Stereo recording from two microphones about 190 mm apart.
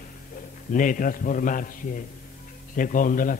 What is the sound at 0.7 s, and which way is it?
A man's voice, 45° left (ahead or behind).